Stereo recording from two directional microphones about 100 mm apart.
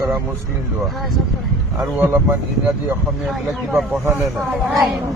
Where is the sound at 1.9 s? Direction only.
25° right (ahead or behind).